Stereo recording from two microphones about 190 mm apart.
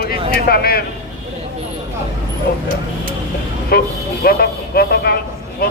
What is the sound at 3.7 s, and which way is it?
A man's voice, 55° left (ahead or behind).